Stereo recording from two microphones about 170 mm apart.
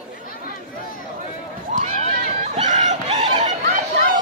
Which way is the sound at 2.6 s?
45° right (ahead or behind).